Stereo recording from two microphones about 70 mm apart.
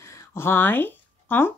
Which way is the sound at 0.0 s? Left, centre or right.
Left.